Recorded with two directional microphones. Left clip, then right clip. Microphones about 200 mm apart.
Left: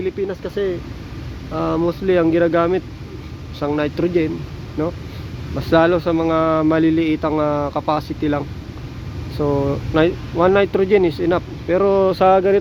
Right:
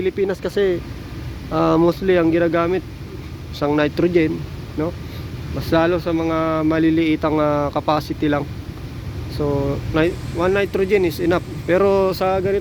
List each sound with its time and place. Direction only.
0.3 s speech: 35° right (ahead or behind)
2.0 s speech: centre (ahead or behind)
3.6 s speech: 15° right (ahead or behind)
4.8 s speech: centre (ahead or behind)
9.4 s speech: 5° left (ahead or behind)
12.2 s speech: 15° left (ahead or behind)